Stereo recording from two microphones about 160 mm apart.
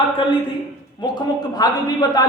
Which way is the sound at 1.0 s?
25° left (ahead or behind).